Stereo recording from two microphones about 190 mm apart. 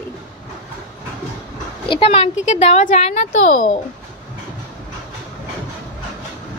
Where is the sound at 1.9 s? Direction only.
30° left (ahead or behind).